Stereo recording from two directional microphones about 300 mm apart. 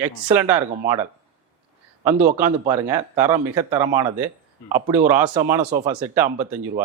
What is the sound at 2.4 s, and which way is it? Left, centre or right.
Speech, centre.